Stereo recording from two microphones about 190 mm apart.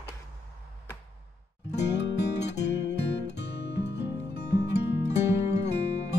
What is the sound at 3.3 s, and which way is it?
Music, 65° left (ahead or behind).